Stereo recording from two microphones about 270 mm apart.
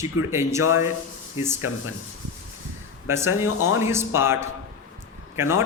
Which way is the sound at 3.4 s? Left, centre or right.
Left.